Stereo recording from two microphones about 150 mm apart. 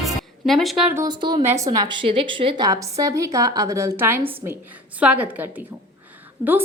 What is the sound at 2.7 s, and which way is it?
A woman's voice, 20° right (ahead or behind).